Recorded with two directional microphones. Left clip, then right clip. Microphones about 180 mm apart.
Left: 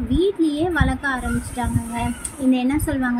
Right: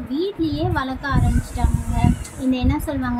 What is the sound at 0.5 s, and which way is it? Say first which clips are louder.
Speech: left 2 dB; 15° left (ahead or behind).